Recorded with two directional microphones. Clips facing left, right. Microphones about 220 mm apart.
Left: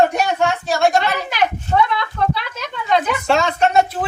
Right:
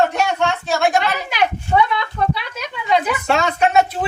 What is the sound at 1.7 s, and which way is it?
Speech, 10° right (ahead or behind).